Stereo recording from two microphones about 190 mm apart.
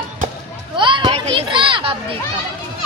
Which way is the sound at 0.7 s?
25° right (ahead or behind).